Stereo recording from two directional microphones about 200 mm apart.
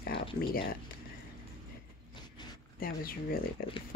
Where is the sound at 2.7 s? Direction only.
50° left (ahead or behind).